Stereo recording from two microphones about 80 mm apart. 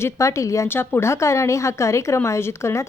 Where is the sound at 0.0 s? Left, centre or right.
Left.